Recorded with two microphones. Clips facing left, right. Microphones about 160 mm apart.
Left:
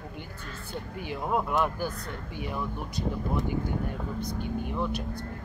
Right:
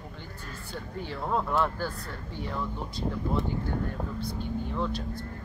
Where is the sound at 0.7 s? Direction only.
15° left (ahead or behind).